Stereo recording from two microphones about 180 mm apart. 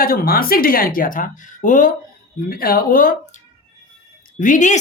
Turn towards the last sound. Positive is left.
turn(degrees=45)  # may be behind; listen again after turning